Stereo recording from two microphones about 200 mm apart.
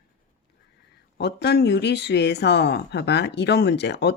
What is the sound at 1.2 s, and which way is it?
Speech, 55° left (ahead or behind).